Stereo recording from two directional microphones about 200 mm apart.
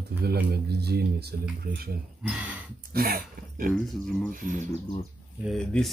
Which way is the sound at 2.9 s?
50° right (ahead or behind).